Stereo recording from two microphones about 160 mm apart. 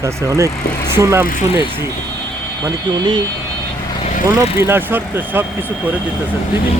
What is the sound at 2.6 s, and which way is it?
Speech, 25° right (ahead or behind).